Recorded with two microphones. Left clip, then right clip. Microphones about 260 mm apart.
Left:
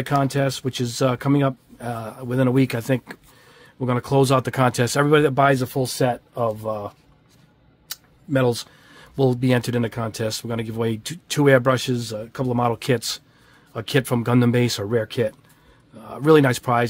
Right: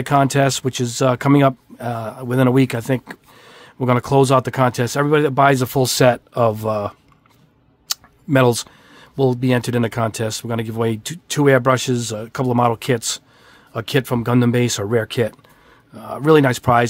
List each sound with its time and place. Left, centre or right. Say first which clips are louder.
0.0 s speech: right 6 dB; centre
3.4 s speech: right 7 dB; right
5.5 s speech: right 4 dB; right
7.9 s a sound: right 6 dB; right
8.9 s speech: right 3 dB; centre